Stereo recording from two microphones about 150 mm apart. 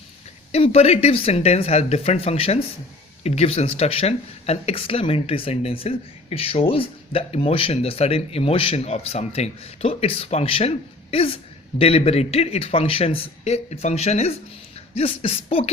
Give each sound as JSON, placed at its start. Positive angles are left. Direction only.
{"t": 0.5, "sound": "a man's voice", "side_deg": 45}